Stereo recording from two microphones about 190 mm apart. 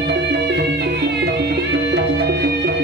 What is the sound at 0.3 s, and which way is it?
Music, 60° right (ahead or behind).